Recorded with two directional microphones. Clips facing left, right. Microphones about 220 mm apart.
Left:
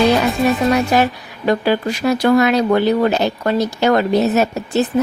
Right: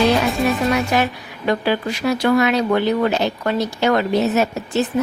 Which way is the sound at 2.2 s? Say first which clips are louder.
Left 3 dB; 40° left (ahead or behind).